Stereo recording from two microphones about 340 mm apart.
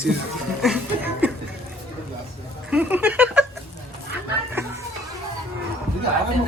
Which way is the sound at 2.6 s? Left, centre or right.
Centre.